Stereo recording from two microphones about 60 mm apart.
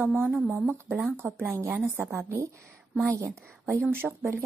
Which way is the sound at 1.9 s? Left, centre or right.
Right.